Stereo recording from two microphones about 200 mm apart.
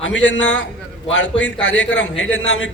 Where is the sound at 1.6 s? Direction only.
65° left (ahead or behind).